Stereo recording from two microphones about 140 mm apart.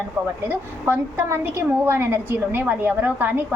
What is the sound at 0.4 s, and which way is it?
A woman's voice, 20° right (ahead or behind).